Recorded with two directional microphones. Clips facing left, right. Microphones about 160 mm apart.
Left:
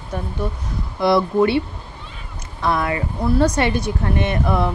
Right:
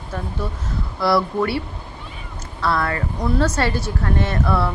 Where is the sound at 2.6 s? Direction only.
15° left (ahead or behind).